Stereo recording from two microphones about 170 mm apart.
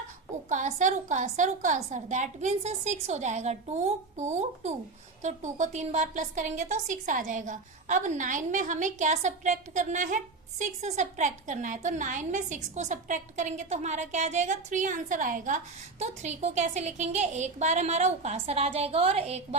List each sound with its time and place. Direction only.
0.5 s a woman's voice: 45° right (ahead or behind)